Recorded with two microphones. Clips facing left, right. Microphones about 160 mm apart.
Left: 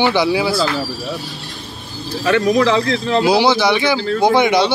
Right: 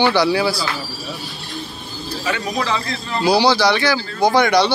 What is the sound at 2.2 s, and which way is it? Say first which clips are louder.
Speech: left 9 dB; 70° left (ahead or behind).